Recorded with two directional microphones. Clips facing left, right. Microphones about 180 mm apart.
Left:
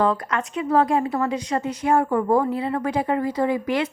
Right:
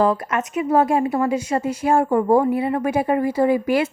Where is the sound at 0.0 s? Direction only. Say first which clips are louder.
Right 3 dB; 25° right (ahead or behind).